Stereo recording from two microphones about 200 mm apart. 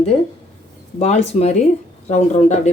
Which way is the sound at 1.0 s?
35° left (ahead or behind).